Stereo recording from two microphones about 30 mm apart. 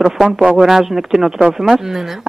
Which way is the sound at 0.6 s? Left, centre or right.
Centre.